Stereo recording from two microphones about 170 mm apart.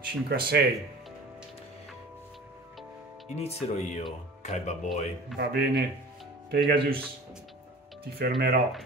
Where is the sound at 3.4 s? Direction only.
40° left (ahead or behind).